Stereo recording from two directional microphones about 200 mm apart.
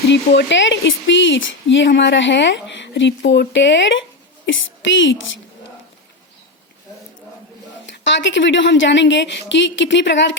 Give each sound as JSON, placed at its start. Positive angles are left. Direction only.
{"t": 0.1, "sound": "a woman's voice", "side_deg": 60}
{"t": 7.9, "sound": "speech", "side_deg": 65}